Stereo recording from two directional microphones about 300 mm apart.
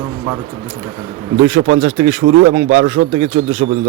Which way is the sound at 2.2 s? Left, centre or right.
Right.